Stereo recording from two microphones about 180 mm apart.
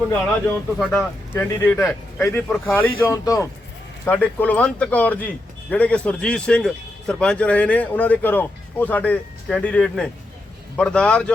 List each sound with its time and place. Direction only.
0.1 s a man's voice: 10° left (ahead or behind)